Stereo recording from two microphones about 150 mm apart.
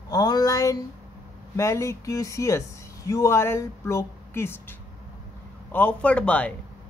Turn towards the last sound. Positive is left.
turn(degrees=10)  # may be behind; listen again after turning